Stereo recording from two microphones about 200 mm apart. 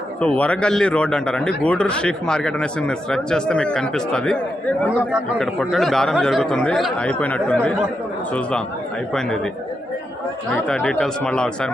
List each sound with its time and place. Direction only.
0.2 s a man's voice: 5° left (ahead or behind)
10.5 s a man's voice: 5° left (ahead or behind)